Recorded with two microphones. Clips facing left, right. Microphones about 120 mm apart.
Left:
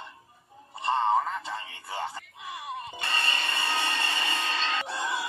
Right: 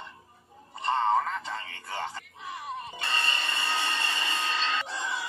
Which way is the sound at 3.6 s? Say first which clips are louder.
Left 1 dB; 25° right (ahead or behind).